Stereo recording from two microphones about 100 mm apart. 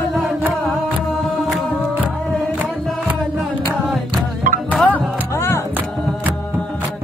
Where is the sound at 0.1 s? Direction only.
Centre (ahead or behind).